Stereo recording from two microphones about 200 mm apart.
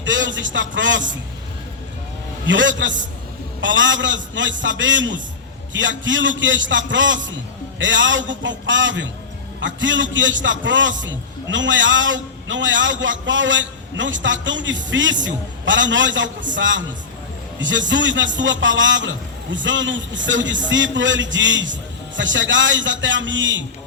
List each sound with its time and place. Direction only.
0.0 s a man's voice: 65° right (ahead or behind)
2.5 s a man's voice: 65° right (ahead or behind)
20.2 s music: 65° right (ahead or behind)
20.7 s a man's voice: 65° right (ahead or behind)